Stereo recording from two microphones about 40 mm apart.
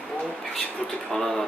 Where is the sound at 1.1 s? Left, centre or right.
Centre.